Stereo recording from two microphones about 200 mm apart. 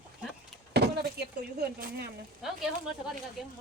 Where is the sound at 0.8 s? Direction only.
55° right (ahead or behind).